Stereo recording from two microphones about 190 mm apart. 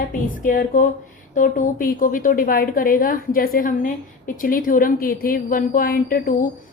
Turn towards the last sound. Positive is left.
turn(degrees=45)  # may be behind; listen again after turning